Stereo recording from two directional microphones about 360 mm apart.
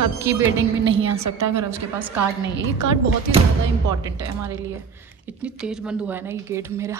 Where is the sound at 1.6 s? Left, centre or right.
Centre.